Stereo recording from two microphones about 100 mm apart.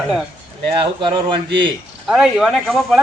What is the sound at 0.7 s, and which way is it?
Speech, 55° right (ahead or behind).